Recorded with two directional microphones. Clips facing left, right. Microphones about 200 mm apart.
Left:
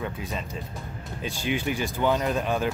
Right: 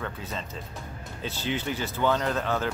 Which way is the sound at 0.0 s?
15° left (ahead or behind).